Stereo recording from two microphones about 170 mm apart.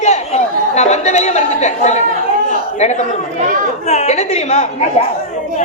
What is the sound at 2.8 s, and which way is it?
A man's voice, 40° left (ahead or behind).